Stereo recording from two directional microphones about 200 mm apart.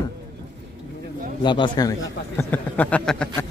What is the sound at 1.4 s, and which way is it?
A man's voice, 25° left (ahead or behind).